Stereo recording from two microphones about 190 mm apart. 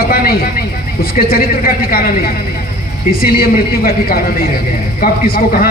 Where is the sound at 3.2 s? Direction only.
50° left (ahead or behind).